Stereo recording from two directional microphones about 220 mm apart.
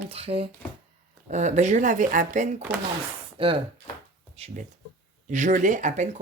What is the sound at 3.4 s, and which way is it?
Speech, 25° right (ahead or behind).